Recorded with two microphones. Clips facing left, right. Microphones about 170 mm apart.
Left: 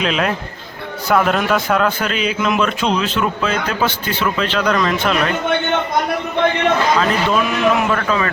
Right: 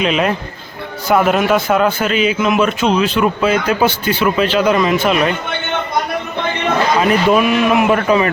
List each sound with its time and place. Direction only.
0.0 s a man's voice: 5° right (ahead or behind)
7.0 s a man's voice: 15° right (ahead or behind)